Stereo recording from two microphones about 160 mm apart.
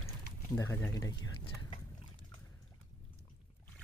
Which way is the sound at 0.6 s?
20° left (ahead or behind).